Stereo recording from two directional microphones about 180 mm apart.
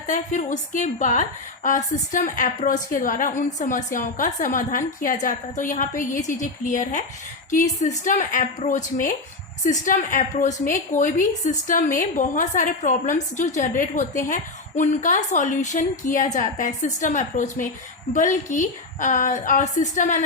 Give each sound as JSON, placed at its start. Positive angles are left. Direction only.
{"t": 0.1, "sound": "a woman's voice", "side_deg": 45}